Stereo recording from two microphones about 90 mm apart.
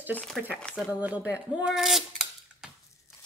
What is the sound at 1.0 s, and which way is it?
Speech, 15° right (ahead or behind).